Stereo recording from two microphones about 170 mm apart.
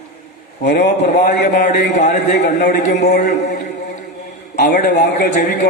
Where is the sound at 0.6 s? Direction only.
85° left.